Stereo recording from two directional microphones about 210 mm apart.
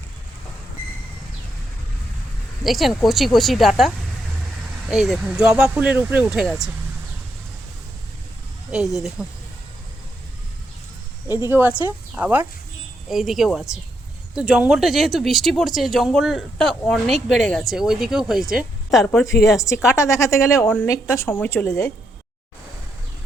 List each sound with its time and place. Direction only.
2.6 s speech: centre (ahead or behind)
9.2 s speech: 5° right (ahead or behind)
11.4 s speech: 10° right (ahead or behind)
19.5 s a woman's voice: 15° left (ahead or behind)